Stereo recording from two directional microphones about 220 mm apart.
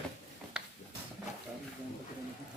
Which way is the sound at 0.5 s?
5° right (ahead or behind).